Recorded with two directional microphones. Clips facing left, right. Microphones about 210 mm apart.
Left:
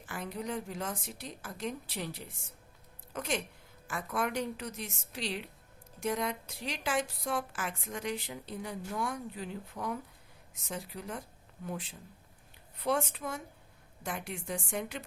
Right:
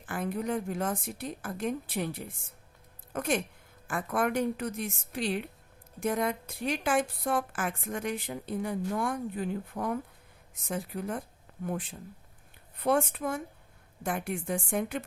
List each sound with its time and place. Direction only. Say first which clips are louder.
0.0 s a woman's voice: right 6 dB; 50° right (ahead or behind)